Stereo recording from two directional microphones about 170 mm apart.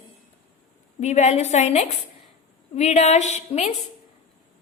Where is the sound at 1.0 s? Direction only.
40° left (ahead or behind).